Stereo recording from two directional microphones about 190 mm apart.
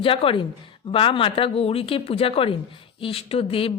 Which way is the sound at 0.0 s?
30° left (ahead or behind).